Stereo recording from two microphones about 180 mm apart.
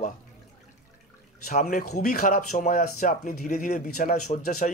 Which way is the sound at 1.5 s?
45° left (ahead or behind).